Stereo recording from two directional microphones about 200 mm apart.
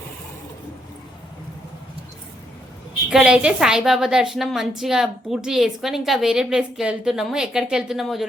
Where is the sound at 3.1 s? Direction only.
5° right (ahead or behind).